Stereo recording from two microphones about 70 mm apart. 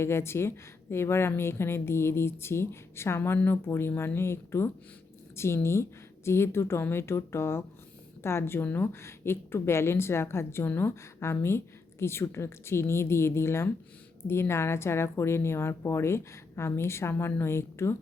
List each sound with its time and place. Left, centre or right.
0.0 s a woman's voice: left